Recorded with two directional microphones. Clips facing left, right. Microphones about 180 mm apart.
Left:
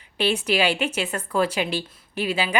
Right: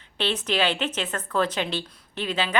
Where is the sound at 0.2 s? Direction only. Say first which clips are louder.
Left 3 dB; 10° left (ahead or behind).